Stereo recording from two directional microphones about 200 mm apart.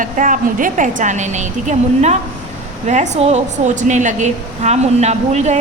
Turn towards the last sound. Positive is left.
turn(degrees=-35)  # may be behind; listen again after turning